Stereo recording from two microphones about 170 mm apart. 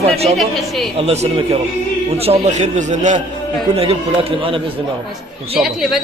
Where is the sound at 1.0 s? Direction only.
40° right (ahead or behind).